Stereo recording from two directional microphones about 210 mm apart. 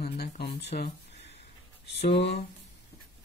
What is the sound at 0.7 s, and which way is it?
Speech, 40° left (ahead or behind).